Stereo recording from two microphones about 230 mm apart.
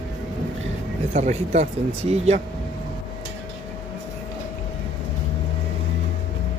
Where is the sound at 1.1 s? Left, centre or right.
Right.